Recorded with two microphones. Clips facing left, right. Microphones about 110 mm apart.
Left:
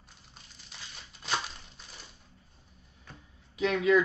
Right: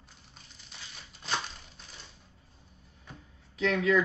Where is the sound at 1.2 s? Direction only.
5° left (ahead or behind).